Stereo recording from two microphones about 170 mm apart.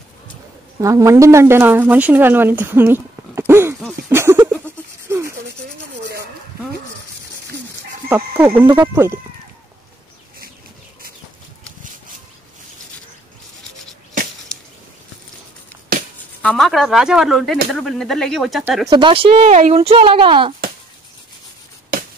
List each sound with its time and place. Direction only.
0.7 s speech: 20° right (ahead or behind)
4.1 s a sound: 15° right (ahead or behind)
5.1 s rub: 15° right (ahead or behind)
8.1 s speech: 10° right (ahead or behind)
16.4 s speech: centre (ahead or behind)
18.9 s speech: 30° right (ahead or behind)